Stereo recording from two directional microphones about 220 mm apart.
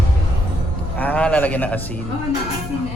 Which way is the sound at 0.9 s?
5° left (ahead or behind).